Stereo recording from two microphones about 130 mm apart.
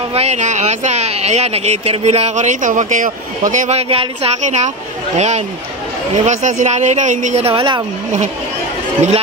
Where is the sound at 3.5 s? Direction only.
70° right (ahead or behind).